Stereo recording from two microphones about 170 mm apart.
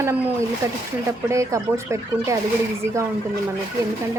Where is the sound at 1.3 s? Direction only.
15° right (ahead or behind).